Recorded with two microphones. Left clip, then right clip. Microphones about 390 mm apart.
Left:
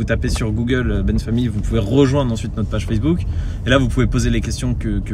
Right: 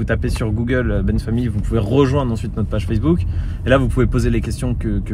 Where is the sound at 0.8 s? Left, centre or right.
Right.